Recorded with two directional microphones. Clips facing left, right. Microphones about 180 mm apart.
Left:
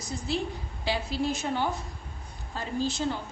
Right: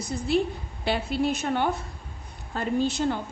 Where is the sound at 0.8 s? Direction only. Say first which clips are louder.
Right 4 dB; 60° right (ahead or behind).